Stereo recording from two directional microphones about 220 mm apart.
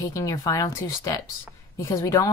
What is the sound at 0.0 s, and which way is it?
Speech, 15° left (ahead or behind).